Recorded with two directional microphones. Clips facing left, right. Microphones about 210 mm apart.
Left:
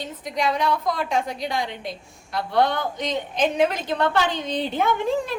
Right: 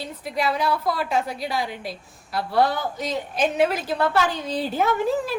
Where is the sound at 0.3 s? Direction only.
5° right (ahead or behind).